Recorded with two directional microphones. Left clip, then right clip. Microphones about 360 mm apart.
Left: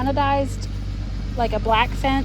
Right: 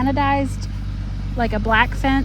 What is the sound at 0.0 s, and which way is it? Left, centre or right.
Speech, centre.